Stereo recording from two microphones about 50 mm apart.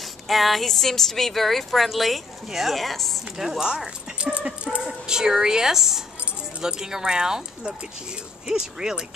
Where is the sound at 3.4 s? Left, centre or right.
Centre.